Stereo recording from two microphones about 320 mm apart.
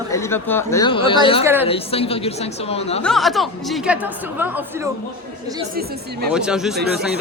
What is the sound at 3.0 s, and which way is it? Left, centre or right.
Speech, centre.